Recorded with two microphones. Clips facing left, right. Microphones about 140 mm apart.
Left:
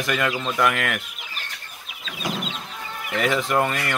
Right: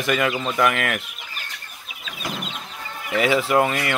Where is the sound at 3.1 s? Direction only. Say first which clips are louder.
Right 3 dB; 5° right (ahead or behind).